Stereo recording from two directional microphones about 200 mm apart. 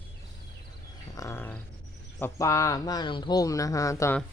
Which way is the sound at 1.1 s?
15° left (ahead or behind).